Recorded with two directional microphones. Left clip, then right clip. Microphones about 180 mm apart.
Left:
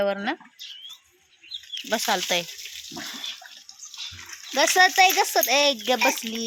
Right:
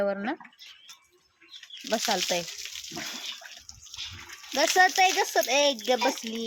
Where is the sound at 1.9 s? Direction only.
5° left (ahead or behind).